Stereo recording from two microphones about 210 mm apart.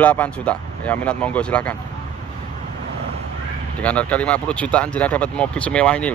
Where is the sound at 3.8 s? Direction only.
5° left (ahead or behind).